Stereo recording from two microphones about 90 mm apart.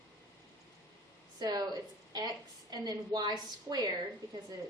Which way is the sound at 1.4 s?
50° right (ahead or behind).